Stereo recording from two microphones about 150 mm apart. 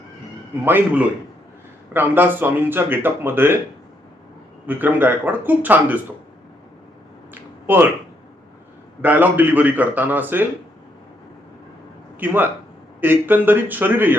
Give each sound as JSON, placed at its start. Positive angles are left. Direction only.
{"t": 0.6, "sound": "speech", "side_deg": -15}
{"t": 4.6, "sound": "speech", "side_deg": -10}
{"t": 7.7, "sound": "speech", "side_deg": -15}
{"t": 9.0, "sound": "speech", "side_deg": -10}
{"t": 12.2, "sound": "speech", "side_deg": -15}